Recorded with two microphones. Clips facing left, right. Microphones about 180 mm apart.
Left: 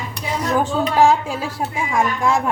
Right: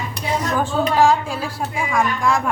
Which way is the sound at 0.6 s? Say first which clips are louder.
Left 1 dB; 20° left (ahead or behind).